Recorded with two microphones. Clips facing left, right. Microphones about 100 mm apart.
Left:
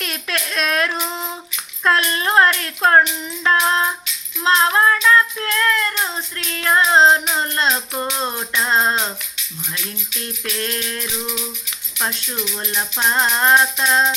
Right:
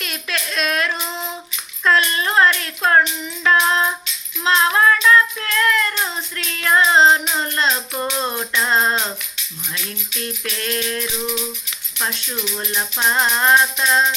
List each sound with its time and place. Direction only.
0.0 s a sound: 45° left (ahead or behind)
1.8 s child singing: 45° left (ahead or behind)
3.4 s music: 35° left (ahead or behind)
7.7 s music: 5° left (ahead or behind)
8.2 s music: 15° left (ahead or behind)
10.4 s music: 35° left (ahead or behind)
12.5 s music: centre (ahead or behind)